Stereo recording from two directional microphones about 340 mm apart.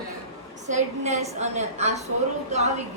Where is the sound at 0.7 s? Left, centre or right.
Centre.